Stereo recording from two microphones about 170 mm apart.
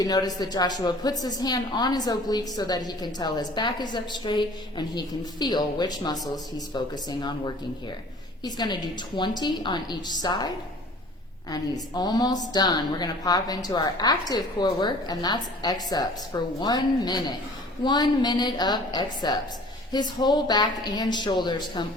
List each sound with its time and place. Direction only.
0.0 s a woman's voice: 20° left (ahead or behind)
11.5 s a woman's voice: 25° left (ahead or behind)